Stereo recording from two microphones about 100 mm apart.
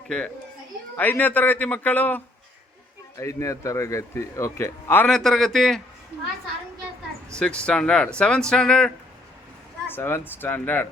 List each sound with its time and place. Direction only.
0.9 s speech: 15° left (ahead or behind)
3.2 s speech: 30° left (ahead or behind)
5.0 s a man's voice: 5° left (ahead or behind)
7.3 s speech: 10° left (ahead or behind)
9.8 s speech: 20° left (ahead or behind)